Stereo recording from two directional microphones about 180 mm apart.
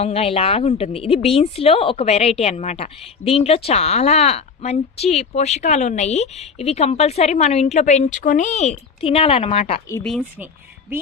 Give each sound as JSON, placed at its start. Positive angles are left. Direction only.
{"t": 0.0, "sound": "a woman's voice", "side_deg": 35}
{"t": 10.0, "sound": "speech", "side_deg": 5}
{"t": 10.4, "sound": "speech", "side_deg": -10}